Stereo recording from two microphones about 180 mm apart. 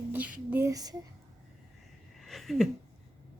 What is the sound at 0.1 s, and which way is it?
Speech, 10° right (ahead or behind).